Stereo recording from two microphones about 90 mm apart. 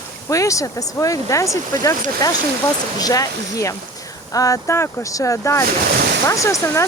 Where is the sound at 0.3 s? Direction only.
35° left (ahead or behind).